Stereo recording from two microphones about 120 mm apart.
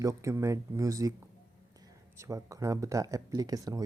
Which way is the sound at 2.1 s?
25° right (ahead or behind).